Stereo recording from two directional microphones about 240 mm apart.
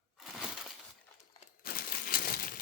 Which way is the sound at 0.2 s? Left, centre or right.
Centre.